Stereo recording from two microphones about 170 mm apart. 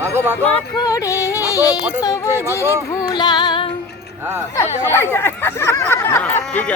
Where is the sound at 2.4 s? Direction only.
15° left (ahead or behind).